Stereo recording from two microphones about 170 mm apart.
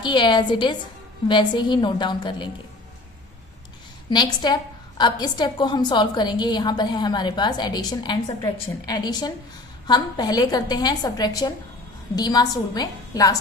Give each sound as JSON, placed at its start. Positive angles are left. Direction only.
{"t": 0.0, "sound": "a woman's voice", "side_deg": 25}
{"t": 4.1, "sound": "a woman's voice", "side_deg": 25}